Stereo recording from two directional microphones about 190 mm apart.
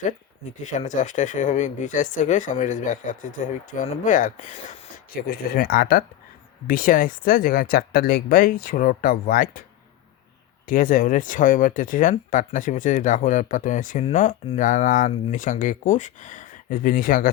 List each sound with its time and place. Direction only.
0.6 s speech: 40° left (ahead or behind)
5.3 s speech: 50° left (ahead or behind)
10.7 s speech: 45° left (ahead or behind)